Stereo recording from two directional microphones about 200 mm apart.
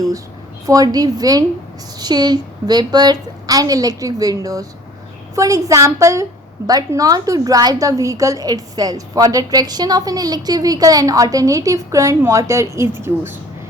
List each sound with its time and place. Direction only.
0.6 s a woman's voice: 15° right (ahead or behind)